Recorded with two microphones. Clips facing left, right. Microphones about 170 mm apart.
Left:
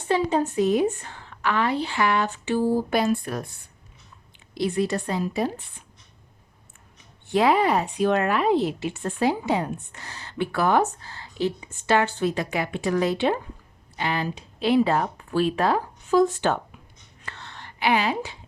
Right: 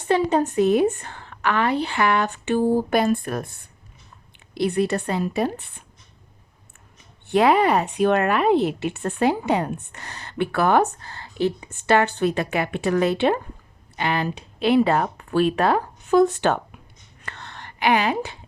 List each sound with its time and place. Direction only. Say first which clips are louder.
0.1 s speech: right 3 dB; 65° right (ahead or behind)
7.3 s speech: right 3 dB; 60° right (ahead or behind)
17.2 s whispering: right 2 dB; 60° right (ahead or behind)